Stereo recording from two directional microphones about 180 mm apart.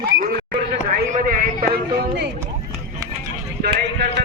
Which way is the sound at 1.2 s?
55° right (ahead or behind).